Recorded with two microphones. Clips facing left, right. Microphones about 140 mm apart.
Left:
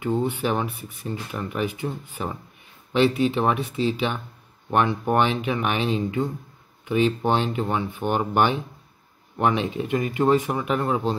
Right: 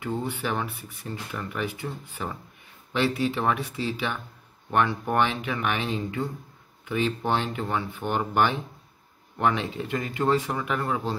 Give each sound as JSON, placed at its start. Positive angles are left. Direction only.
{"t": 0.0, "sound": "speech", "side_deg": 20}